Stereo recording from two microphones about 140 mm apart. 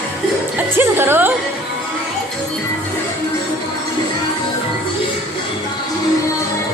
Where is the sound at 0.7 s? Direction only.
15° right (ahead or behind).